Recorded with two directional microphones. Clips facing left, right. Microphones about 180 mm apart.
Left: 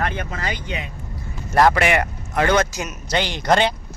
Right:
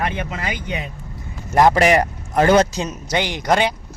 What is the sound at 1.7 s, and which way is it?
A man's voice, 35° right (ahead or behind).